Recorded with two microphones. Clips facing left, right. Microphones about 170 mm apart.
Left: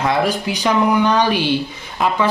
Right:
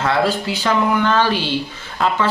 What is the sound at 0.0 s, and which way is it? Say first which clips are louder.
Speech: even; 15° left (ahead or behind).